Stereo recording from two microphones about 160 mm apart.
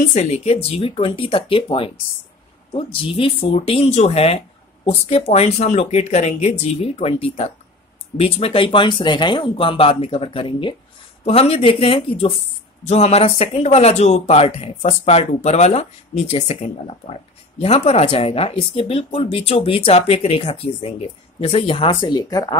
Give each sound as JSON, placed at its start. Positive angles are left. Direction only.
{"t": 0.0, "sound": "speech", "side_deg": 45}